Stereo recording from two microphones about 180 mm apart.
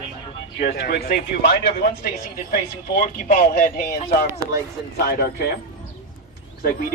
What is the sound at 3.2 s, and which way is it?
Speech, 45° left (ahead or behind).